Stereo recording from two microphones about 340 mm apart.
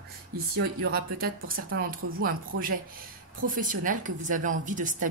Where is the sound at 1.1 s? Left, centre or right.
Right.